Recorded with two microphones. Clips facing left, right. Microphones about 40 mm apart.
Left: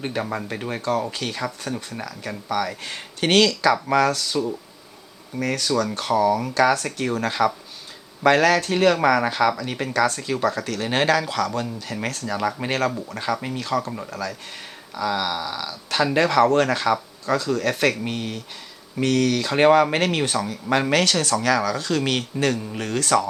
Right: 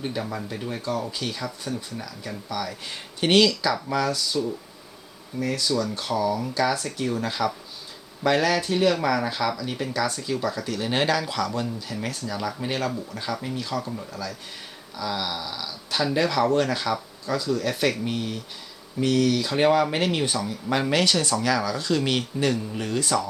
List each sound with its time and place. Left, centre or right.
0.0 s speech: left
7.3 s speech: left
8.2 s speech: left
10.8 s speech: left
11.3 s speech: left
12.3 s speech: left
14.9 s speech: left